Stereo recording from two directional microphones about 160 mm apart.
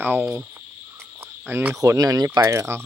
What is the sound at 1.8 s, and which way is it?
Speech, 20° right (ahead or behind).